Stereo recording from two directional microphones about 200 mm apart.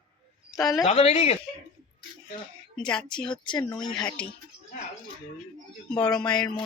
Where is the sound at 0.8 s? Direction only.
30° left (ahead or behind).